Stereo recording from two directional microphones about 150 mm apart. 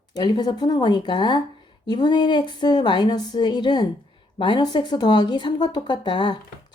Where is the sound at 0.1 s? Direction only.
30° left (ahead or behind).